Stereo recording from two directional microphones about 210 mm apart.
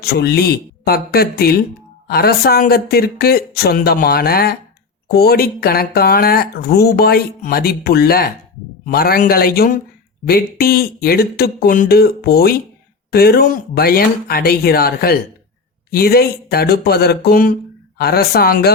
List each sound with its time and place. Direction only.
0.0 s speech: 50° left (ahead or behind)